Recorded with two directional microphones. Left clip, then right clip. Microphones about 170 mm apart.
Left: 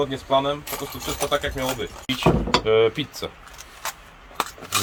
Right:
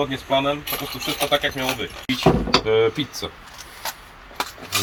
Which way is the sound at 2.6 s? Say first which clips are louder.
Even; 5° right (ahead or behind).